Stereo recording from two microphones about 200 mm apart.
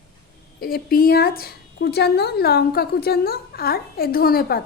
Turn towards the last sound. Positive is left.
turn(degrees=50)  # may be behind; listen again after turning